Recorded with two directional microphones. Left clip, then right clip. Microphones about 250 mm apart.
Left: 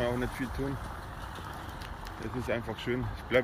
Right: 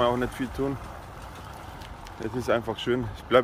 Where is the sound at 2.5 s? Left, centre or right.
Centre.